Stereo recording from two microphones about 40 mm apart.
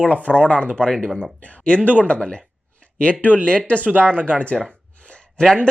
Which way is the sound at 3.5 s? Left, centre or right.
Left.